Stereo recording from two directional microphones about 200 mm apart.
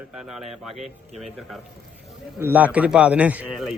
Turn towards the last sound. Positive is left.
turn(degrees=-5)  # may be behind; listen again after turning